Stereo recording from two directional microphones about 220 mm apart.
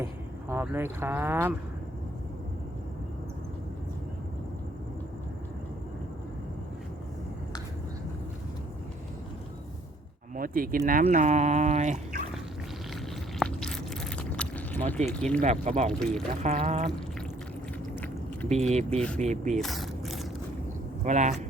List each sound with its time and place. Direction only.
0.0 s speech: 10° right (ahead or behind)
10.3 s speech: 40° right (ahead or behind)
13.4 s a sound: 5° left (ahead or behind)
15.1 s speech: 5° left (ahead or behind)
15.4 s speech: 30° right (ahead or behind)
15.9 s speech: centre (ahead or behind)
16.4 s speech: 30° right (ahead or behind)
18.4 s speech: 30° right (ahead or behind)
19.6 s a sound: centre (ahead or behind)
21.0 s speech: 35° right (ahead or behind)